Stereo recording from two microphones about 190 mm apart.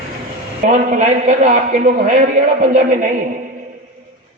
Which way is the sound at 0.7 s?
40° right (ahead or behind).